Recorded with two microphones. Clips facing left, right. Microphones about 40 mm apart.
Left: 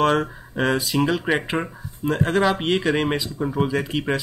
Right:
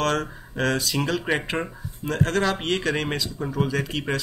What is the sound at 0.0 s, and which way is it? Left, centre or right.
Speech, centre.